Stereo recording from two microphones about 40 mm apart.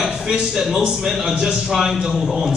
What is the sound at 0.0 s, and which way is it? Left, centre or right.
A man's voice, centre.